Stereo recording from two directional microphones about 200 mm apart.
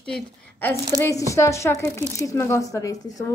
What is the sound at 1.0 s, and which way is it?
Speech, 15° left (ahead or behind).